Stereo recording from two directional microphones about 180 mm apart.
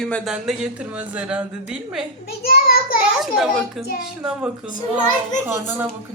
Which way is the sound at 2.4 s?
55° left (ahead or behind).